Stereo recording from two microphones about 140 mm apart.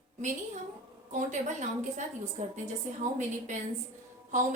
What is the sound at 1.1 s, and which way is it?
Speech, 60° right (ahead or behind).